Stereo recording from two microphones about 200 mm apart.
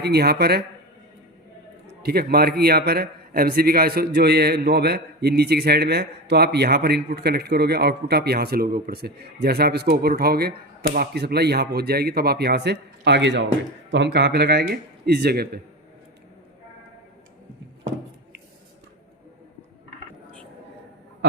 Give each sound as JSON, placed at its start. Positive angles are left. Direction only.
{"t": 0.0, "sound": "a man's voice", "side_deg": -55}
{"t": 2.0, "sound": "a man's voice", "side_deg": -50}